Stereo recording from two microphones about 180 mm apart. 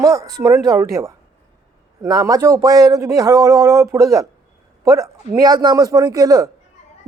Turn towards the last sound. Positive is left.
turn(degrees=-20)  # may be behind; listen again after turning